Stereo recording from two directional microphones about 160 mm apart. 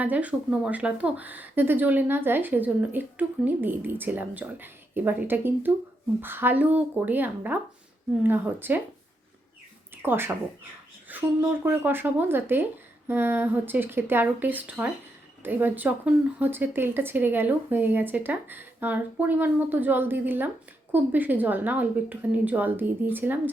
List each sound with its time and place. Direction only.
0.0 s speech: 10° right (ahead or behind)
9.9 s speech: 15° right (ahead or behind)